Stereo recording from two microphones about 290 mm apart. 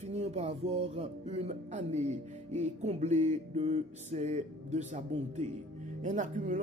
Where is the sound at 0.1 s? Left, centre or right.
Right.